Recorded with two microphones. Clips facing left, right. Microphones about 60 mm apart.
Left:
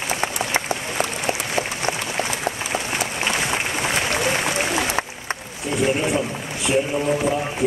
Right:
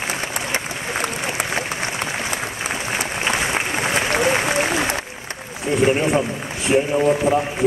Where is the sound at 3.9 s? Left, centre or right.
Right.